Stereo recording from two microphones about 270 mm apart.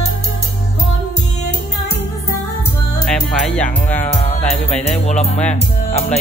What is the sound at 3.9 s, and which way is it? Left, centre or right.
Music, left.